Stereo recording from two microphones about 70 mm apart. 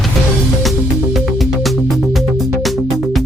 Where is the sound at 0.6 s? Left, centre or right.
Centre.